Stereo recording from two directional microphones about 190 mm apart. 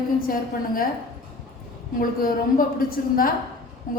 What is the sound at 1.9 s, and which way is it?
A woman's voice, 50° left (ahead or behind).